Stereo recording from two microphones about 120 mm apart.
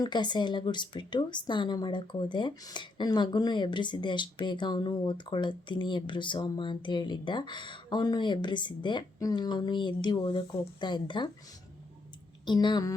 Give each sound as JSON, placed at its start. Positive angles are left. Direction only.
{"t": 0.0, "sound": "speech", "side_deg": 40}
{"t": 12.5, "sound": "speech", "side_deg": 40}